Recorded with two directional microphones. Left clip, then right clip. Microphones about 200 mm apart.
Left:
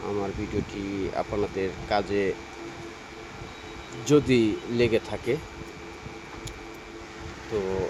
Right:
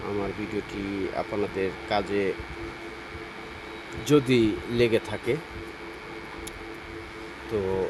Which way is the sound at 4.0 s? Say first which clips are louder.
Even; centre (ahead or behind).